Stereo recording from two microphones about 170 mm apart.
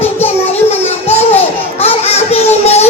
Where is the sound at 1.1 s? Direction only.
40° left (ahead or behind).